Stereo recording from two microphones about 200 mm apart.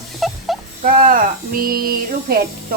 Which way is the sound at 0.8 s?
45° right (ahead or behind).